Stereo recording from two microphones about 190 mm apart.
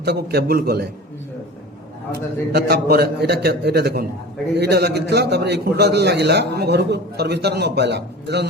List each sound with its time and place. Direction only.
0.0 s a man's voice: 60° right (ahead or behind)
2.5 s a man's voice: 60° right (ahead or behind)